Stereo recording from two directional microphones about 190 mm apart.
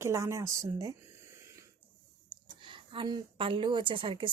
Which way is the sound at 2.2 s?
25° right (ahead or behind).